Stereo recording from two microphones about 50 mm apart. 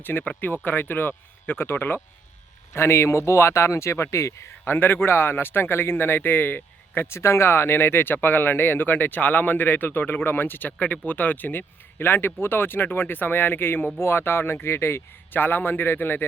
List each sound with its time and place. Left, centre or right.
0.0 s speech: left
2.7 s speech: left
4.6 s speech: left
7.2 s speech: left
15.3 s speech: left